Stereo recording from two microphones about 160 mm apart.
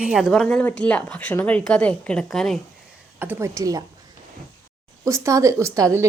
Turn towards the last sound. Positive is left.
turn(degrees=-20)  # may be behind; listen again after turning